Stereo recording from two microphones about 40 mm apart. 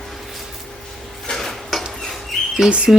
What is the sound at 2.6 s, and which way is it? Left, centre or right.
Speech, right.